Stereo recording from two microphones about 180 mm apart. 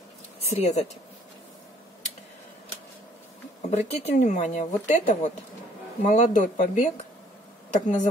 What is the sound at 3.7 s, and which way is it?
Speech, 40° left (ahead or behind).